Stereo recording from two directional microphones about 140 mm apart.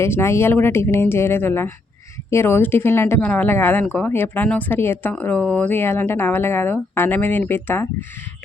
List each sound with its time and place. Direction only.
0.0 s speech: 20° left (ahead or behind)